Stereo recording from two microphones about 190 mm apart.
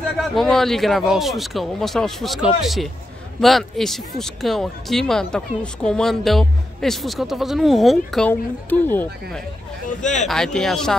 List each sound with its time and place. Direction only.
0.3 s speech: centre (ahead or behind)